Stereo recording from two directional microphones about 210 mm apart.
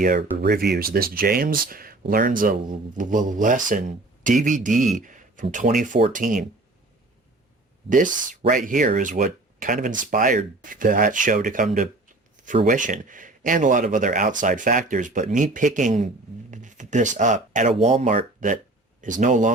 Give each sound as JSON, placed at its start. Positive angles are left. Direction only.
{"t": 0.3, "sound": "speech", "side_deg": -50}
{"t": 4.7, "sound": "speech", "side_deg": 0}
{"t": 4.9, "sound": "speech", "side_deg": -40}
{"t": 7.9, "sound": "speech", "side_deg": -40}